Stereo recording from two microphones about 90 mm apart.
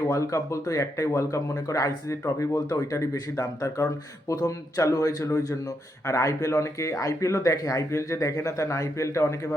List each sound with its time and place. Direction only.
0.0 s speech: 40° left (ahead or behind)